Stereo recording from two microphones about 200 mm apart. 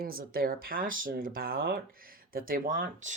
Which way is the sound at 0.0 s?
50° right (ahead or behind).